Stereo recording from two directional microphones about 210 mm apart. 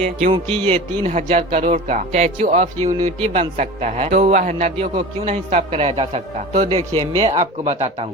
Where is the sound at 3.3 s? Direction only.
30° right (ahead or behind).